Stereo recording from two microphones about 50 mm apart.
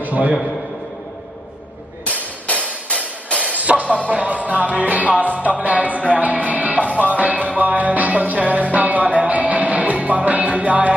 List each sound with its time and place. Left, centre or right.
0.0 s a sound: right
2.0 s hammer: left
2.9 s music: left
3.5 s music: right